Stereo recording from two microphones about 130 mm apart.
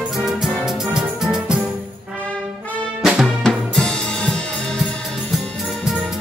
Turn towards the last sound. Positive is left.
turn(degrees=5)  # may be behind; listen again after turning